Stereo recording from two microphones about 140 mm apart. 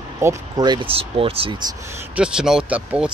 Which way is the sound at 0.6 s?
35° right (ahead or behind).